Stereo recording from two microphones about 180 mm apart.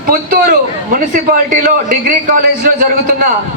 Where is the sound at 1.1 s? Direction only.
50° right (ahead or behind).